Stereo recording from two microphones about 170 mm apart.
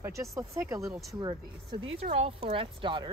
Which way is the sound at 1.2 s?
30° right (ahead or behind).